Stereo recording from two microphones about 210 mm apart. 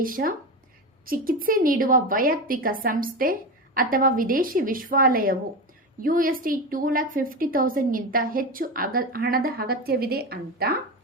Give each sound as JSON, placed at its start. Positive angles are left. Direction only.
{"t": 0.0, "sound": "a woman's voice", "side_deg": -40}